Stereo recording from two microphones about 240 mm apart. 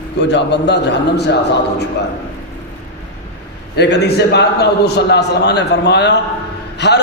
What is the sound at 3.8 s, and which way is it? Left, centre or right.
A man's voice, left.